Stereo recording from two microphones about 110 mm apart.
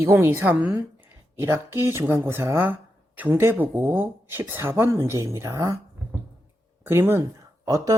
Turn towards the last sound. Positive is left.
turn(degrees=-30)  # may be behind; listen again after turning